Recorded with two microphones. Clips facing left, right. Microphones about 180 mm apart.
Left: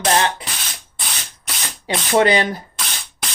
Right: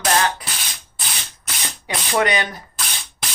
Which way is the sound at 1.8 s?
30° left (ahead or behind).